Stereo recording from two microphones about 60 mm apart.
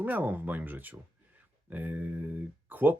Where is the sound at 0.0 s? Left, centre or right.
Right.